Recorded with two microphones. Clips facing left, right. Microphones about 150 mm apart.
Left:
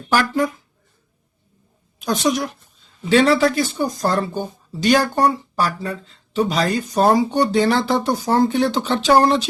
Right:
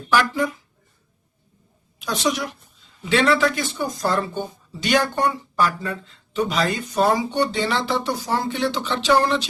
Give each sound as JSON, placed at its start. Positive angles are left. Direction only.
{"t": 0.1, "sound": "a woman's voice", "side_deg": 45}
{"t": 2.0, "sound": "a woman's voice", "side_deg": 45}